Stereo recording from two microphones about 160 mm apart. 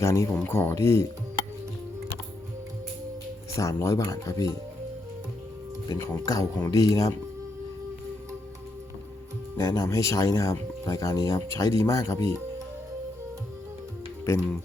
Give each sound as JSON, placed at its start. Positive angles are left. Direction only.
{"t": 0.0, "sound": "speech", "side_deg": 15}
{"t": 3.6, "sound": "speech", "side_deg": 20}
{"t": 5.9, "sound": "speech", "side_deg": 20}
{"t": 9.6, "sound": "speech", "side_deg": 20}